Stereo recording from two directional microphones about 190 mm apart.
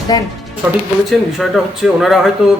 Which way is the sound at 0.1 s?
20° left (ahead or behind).